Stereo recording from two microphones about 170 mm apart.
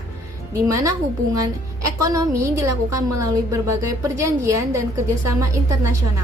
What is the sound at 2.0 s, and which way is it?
A woman's voice, 20° right (ahead or behind).